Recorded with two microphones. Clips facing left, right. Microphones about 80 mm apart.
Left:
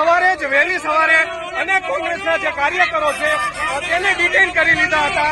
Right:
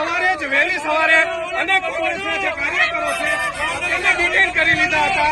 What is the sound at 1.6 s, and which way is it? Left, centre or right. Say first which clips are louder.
Speech: left 3 dB; centre.